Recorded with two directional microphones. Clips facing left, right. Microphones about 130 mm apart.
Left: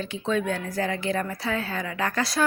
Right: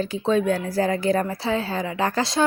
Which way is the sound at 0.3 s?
35° right (ahead or behind).